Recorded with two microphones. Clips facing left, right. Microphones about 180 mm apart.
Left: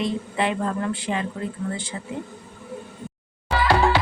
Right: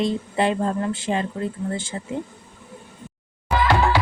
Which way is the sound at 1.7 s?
45° right (ahead or behind).